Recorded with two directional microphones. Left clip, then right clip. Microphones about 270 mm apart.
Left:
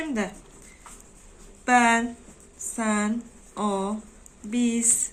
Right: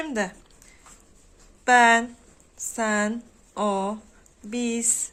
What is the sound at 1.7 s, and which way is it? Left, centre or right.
Speech, right.